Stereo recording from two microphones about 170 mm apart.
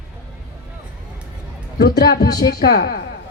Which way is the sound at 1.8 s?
70° left (ahead or behind).